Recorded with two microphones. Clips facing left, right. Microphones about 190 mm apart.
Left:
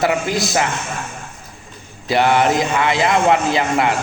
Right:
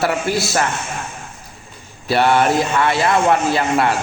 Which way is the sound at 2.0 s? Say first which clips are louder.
Even; 20° left (ahead or behind).